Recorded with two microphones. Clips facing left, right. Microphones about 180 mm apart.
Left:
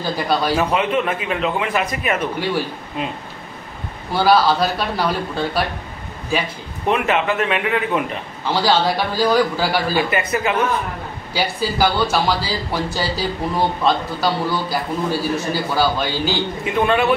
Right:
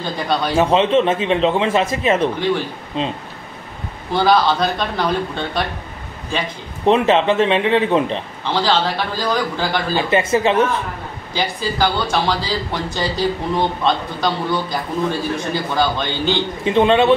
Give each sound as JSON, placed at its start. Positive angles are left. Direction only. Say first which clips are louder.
{"t": 0.5, "sound": "a man's voice", "louder": "right 4 dB", "side_deg": -25}
{"t": 4.1, "sound": "a man's voice", "louder": "even", "side_deg": 5}
{"t": 6.9, "sound": "a man's voice", "louder": "right 5 dB", "side_deg": -25}
{"t": 8.6, "sound": "a man's voice", "louder": "left 3 dB", "side_deg": 10}
{"t": 10.0, "sound": "a man's voice", "louder": "right 4 dB", "side_deg": -25}
{"t": 11.3, "sound": "speech", "louder": "left 1 dB", "side_deg": 10}
{"t": 16.6, "sound": "a man's voice", "louder": "right 5 dB", "side_deg": -25}